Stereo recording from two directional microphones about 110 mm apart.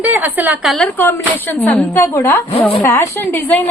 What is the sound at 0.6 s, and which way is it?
Speech, centre (ahead or behind).